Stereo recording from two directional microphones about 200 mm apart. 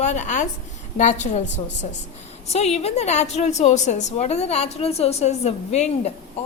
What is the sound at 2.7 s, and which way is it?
A woman's voice, 30° left (ahead or behind).